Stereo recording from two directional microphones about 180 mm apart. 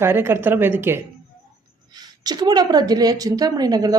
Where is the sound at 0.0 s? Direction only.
15° right (ahead or behind).